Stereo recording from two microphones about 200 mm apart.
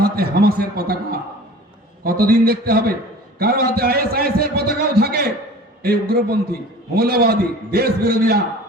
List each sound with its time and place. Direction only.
0.0 s a man's voice: 50° right (ahead or behind)
2.0 s a man's voice: 50° right (ahead or behind)